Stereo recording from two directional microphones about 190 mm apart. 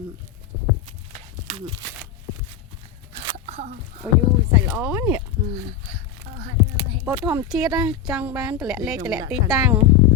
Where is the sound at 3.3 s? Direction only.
35° right (ahead or behind).